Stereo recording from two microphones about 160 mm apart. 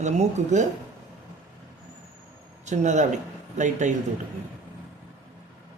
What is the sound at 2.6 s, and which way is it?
Speech, 45° right (ahead or behind).